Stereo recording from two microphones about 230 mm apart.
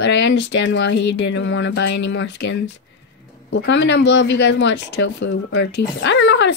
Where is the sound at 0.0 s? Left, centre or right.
Left.